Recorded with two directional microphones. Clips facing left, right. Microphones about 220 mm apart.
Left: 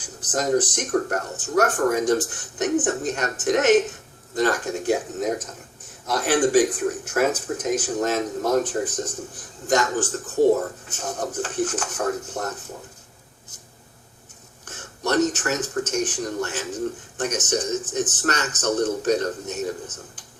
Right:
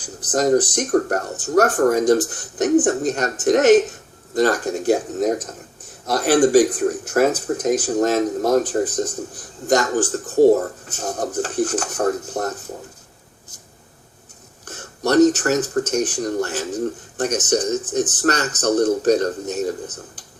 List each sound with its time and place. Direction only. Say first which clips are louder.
0.0 s speech: right 6 dB; 35° right (ahead or behind)
14.6 s speech: right 5 dB; 35° right (ahead or behind)